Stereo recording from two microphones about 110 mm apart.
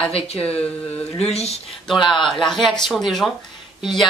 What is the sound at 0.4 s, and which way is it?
Speech, 10° left (ahead or behind).